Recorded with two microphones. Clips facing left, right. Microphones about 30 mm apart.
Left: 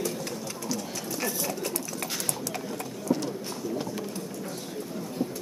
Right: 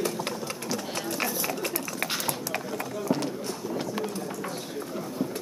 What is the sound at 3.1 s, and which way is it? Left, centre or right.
Run, right.